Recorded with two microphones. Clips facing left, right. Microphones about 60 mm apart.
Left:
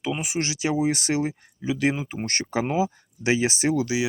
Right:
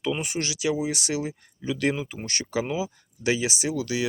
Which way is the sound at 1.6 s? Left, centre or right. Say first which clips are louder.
Left 2 dB; centre.